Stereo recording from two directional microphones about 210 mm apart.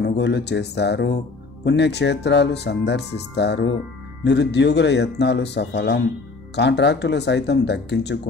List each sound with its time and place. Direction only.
0.0 s a man's voice: 55° left (ahead or behind)